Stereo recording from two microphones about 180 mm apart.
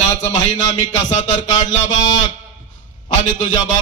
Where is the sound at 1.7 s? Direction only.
90° left.